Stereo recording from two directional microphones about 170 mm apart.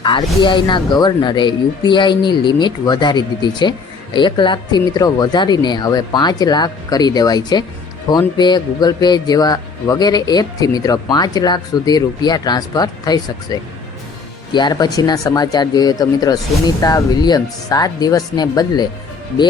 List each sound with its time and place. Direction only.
0.0 s speech: 30° left (ahead or behind)